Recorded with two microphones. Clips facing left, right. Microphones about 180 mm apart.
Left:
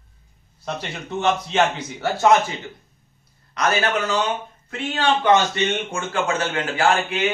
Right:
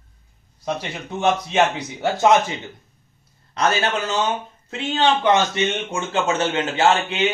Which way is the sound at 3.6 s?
25° right (ahead or behind).